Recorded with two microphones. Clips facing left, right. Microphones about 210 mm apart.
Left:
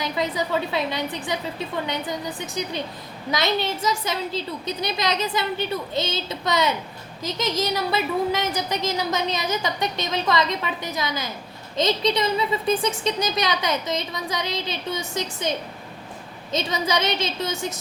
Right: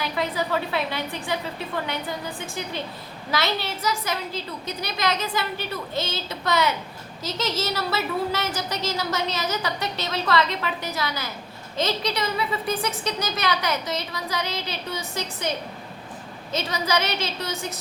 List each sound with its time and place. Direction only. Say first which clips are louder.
0.0 s speech: left 1 dB; 20° left (ahead or behind)
16.6 s speech: left 1 dB; 20° left (ahead or behind)